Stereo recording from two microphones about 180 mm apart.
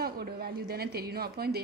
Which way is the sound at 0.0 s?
60° right (ahead or behind).